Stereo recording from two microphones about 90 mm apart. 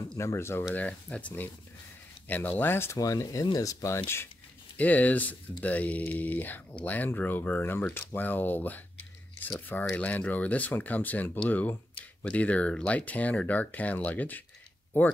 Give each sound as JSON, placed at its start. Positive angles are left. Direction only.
{"t": 0.2, "sound": "speech", "side_deg": 30}
{"t": 0.7, "sound": "speech", "side_deg": 15}
{"t": 3.0, "sound": "speech", "side_deg": 40}